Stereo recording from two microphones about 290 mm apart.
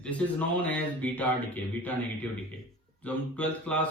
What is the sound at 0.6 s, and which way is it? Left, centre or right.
Speech, centre.